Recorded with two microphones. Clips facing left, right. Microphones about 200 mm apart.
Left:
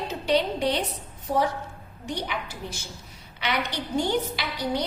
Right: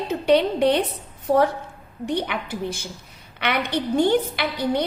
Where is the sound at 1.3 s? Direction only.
70° right (ahead or behind).